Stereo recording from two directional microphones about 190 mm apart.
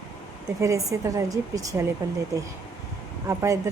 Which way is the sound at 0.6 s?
15° right (ahead or behind).